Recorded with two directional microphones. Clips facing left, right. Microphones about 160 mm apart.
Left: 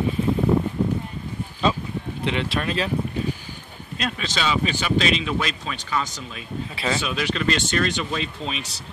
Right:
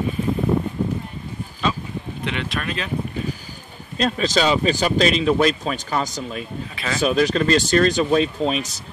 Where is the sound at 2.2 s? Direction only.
30° left (ahead or behind).